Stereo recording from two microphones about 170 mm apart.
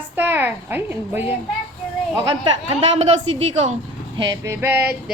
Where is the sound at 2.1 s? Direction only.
25° right (ahead or behind).